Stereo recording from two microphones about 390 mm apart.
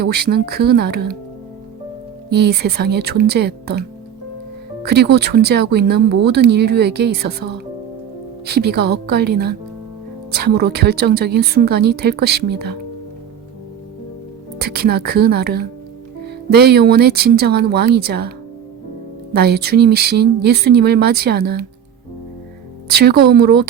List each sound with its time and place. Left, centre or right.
0.0 s speech: right
2.3 s speech: right
4.9 s speech: right
14.6 s speech: right
22.9 s speech: right